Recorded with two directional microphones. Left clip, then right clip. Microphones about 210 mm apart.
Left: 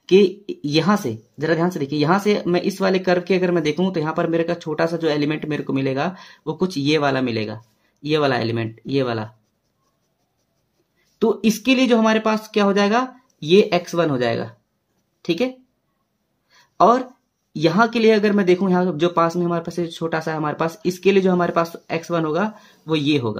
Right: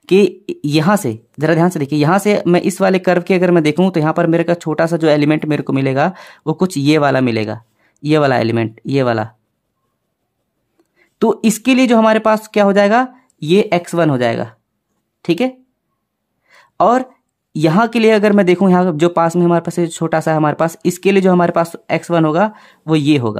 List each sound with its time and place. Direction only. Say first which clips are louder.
0.0 s speech: right 3 dB; 55° right (ahead or behind)
11.1 s speech: right 4 dB; 55° right (ahead or behind)